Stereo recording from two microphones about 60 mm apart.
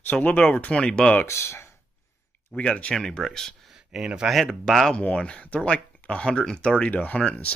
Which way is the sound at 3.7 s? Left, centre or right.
Centre.